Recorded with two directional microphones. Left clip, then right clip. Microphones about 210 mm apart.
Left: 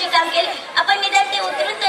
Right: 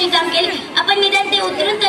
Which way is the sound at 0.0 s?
40° right (ahead or behind).